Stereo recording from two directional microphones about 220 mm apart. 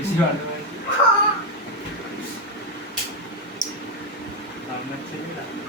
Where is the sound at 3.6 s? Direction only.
35° left (ahead or behind).